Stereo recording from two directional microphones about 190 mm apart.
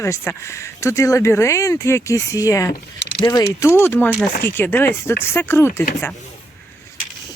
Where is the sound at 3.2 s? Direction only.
20° left (ahead or behind).